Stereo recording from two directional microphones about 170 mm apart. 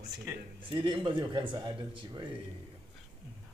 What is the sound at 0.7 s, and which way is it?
Speech, 30° right (ahead or behind).